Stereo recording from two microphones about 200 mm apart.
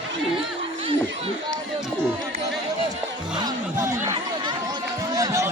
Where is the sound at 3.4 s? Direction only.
15° right (ahead or behind).